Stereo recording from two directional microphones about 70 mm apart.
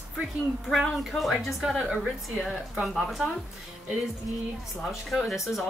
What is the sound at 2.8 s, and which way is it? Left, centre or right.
Speech, centre.